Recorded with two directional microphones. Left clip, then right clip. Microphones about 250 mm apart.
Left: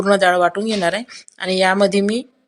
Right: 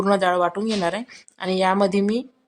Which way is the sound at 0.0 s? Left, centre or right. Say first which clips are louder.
Left 5 dB; centre.